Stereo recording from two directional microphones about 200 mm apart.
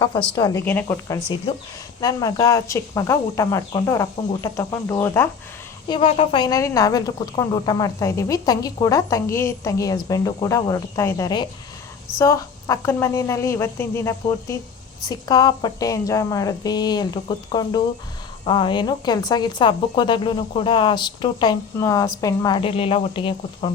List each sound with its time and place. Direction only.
0.3 s speech: 20° left (ahead or behind)
0.6 s a woman's voice: 10° left (ahead or behind)
5.9 s a woman's voice: 30° left (ahead or behind)